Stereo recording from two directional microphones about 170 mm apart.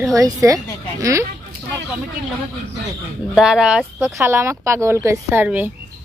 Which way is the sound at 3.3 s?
5° right (ahead or behind).